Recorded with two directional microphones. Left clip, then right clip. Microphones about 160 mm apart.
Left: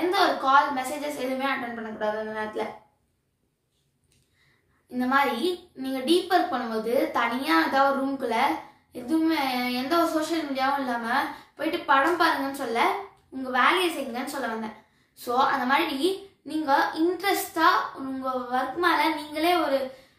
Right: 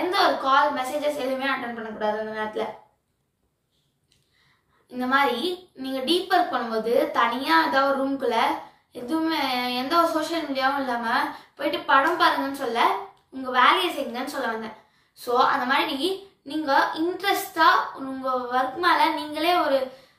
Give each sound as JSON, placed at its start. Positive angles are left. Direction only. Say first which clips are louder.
{"t": 0.1, "sound": "a woman's voice", "louder": "even", "side_deg": 25}
{"t": 4.9, "sound": "a woman's voice", "louder": "right 2 dB", "side_deg": 20}